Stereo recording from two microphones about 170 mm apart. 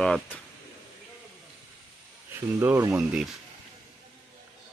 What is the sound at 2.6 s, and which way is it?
Speech, 15° right (ahead or behind).